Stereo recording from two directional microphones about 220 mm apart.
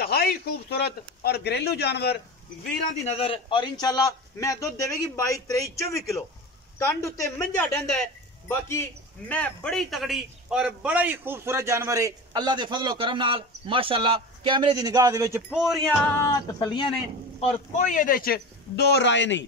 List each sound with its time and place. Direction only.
0.0 s speech: 45° left (ahead or behind)
2.6 s a man's voice: 30° left (ahead or behind); by 15.4 s 15° right (ahead or behind)
15.5 s music: centre (ahead or behind)
16.2 s a man's voice: 20° left (ahead or behind)
17.4 s a man's voice: 35° left (ahead or behind); by 19.4 s 55° left (ahead or behind)